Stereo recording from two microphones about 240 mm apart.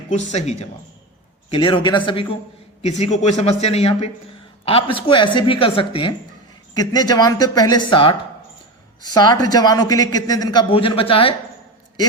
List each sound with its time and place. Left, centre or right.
0.1 s a man's voice: left